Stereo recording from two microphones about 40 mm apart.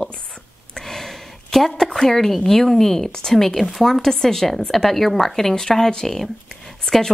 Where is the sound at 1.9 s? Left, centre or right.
Centre.